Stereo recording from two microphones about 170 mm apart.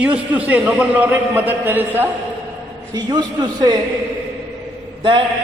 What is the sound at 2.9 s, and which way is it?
Speech, 25° right (ahead or behind).